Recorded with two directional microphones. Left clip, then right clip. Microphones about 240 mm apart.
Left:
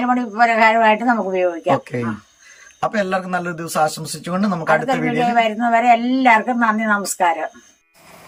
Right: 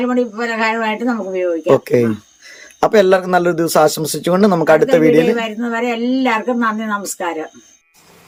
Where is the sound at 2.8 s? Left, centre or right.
Centre.